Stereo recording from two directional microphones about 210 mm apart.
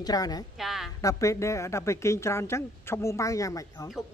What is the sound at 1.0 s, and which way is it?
A woman's voice, 15° left (ahead or behind).